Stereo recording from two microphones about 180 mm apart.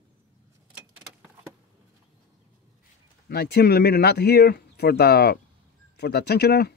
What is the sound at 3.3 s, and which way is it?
Speech, 60° left (ahead or behind).